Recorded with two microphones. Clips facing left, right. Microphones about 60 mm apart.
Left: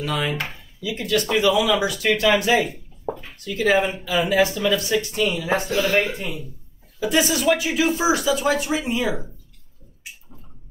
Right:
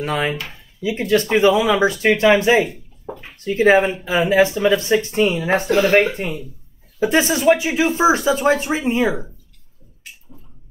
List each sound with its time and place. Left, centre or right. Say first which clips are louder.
0.0 s speech: right 3 dB; right